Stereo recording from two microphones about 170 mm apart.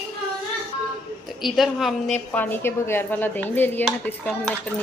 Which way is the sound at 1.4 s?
Centre (ahead or behind).